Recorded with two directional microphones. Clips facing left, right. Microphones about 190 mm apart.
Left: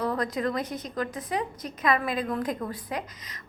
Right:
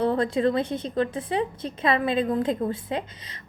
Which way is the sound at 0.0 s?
30° right (ahead or behind).